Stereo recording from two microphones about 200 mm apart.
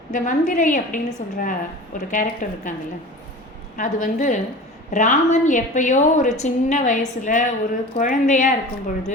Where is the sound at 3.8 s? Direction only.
40° left (ahead or behind).